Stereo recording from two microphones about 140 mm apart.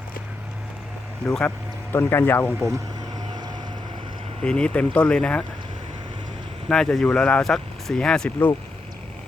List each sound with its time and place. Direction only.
1.5 s speech: 15° left (ahead or behind)
3.2 s vehicle: 30° right (ahead or behind)
4.4 s speech: 5° left (ahead or behind)
6.7 s speech: 5° left (ahead or behind)